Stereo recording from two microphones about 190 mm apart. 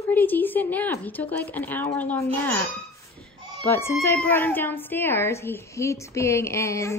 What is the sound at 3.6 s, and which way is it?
A woman's voice, 10° left (ahead or behind).